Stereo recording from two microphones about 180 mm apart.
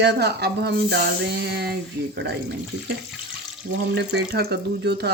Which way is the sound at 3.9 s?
70° right (ahead or behind).